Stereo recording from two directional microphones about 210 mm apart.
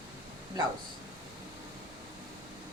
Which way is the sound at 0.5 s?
20° right (ahead or behind).